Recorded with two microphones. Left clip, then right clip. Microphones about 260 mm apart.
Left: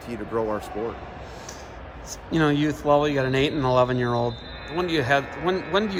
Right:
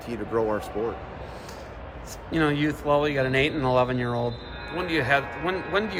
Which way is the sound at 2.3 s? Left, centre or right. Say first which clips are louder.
Left 2 dB; left.